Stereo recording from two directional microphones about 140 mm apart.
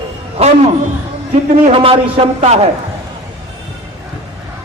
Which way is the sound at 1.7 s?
40° right (ahead or behind).